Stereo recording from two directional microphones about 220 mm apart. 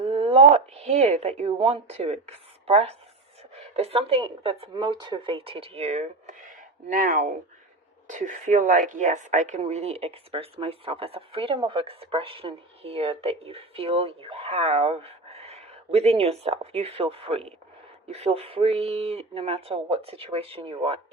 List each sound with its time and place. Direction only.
0.0 s a woman's voice: 25° right (ahead or behind)